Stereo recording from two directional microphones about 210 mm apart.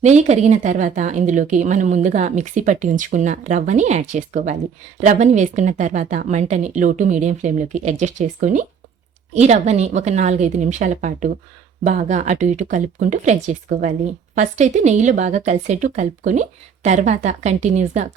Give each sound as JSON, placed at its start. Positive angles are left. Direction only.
{"t": 0.0, "sound": "speech", "side_deg": -35}